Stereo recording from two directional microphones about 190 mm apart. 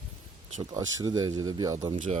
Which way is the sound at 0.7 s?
20° right (ahead or behind).